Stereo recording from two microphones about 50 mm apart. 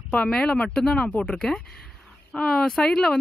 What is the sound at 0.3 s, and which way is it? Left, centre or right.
Speech, left.